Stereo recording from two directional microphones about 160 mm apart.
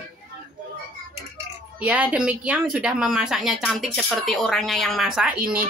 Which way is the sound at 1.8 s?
5° right (ahead or behind).